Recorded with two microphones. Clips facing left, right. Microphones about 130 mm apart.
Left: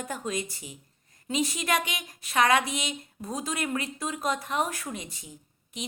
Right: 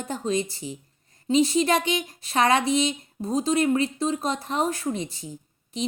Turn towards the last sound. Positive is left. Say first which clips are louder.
# right 10 dB
turn(degrees=-30)  # may be behind; listen again after turning